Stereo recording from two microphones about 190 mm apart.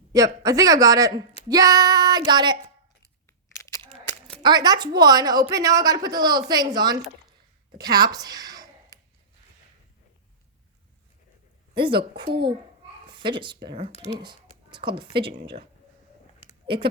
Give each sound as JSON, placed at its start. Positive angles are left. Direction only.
{"t": 0.1, "sound": "a woman's voice", "side_deg": -20}
{"t": 4.4, "sound": "a woman's voice", "side_deg": -20}
{"t": 11.7, "sound": "a woman's voice", "side_deg": -25}
{"t": 13.9, "sound": "speech", "side_deg": 35}
{"t": 14.2, "sound": "speech", "side_deg": -25}
{"t": 16.6, "sound": "speech", "side_deg": -25}